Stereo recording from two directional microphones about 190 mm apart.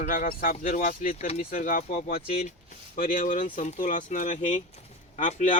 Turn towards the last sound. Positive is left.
turn(degrees=40)  # may be behind; listen again after turning